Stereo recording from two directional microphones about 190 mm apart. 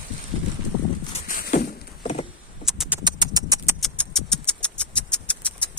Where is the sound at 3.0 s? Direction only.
20° right (ahead or behind).